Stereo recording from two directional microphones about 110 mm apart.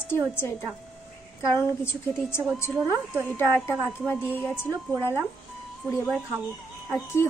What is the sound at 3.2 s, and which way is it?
A woman's voice, 20° left (ahead or behind).